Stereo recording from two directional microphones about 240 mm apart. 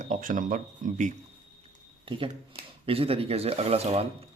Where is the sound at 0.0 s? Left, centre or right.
Right.